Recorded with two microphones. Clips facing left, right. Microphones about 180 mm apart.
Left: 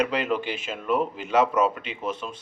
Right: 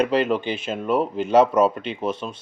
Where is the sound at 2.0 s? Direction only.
30° right (ahead or behind).